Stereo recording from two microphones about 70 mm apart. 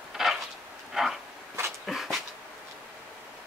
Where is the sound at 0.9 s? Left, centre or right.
Centre.